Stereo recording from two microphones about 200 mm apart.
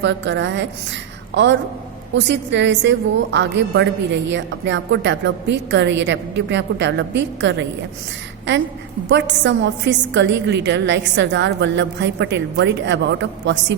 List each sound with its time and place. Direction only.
0.0 s a woman's voice: 65° right (ahead or behind)
9.0 s a woman's voice: 65° right (ahead or behind)